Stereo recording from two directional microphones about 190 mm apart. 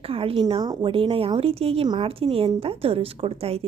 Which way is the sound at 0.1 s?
30° right (ahead or behind).